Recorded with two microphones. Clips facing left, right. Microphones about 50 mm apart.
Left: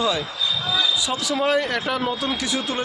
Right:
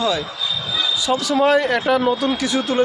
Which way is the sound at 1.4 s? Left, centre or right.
Centre.